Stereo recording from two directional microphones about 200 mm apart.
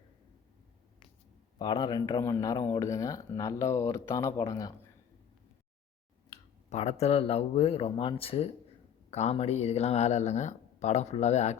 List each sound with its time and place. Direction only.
1.5 s speech: 20° left (ahead or behind)
6.7 s speech: 35° left (ahead or behind)